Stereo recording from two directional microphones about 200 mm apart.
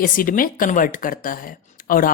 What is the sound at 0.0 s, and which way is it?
A woman's voice, 45° left (ahead or behind).